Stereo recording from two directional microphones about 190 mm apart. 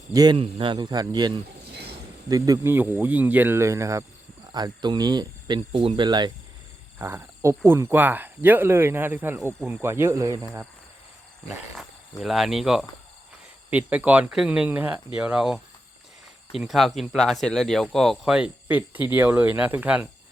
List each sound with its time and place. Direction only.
0.1 s speech: 20° right (ahead or behind)
1.7 s a sound: 60° right (ahead or behind)
2.3 s speech: 15° right (ahead or behind)
12.2 s speech: centre (ahead or behind)